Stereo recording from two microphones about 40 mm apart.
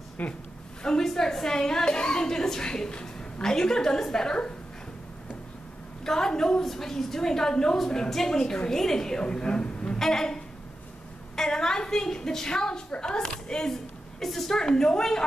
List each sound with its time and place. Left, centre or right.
0.2 s a woman's voice: left
0.8 s a woman's voice: centre
6.0 s a woman's voice: centre
9.9 s a woman's voice: centre
14.2 s a woman's voice: centre